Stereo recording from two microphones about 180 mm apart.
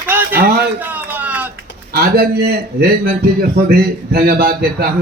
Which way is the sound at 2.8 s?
60° right (ahead or behind).